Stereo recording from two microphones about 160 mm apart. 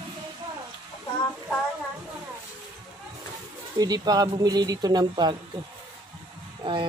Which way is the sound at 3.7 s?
25° right (ahead or behind).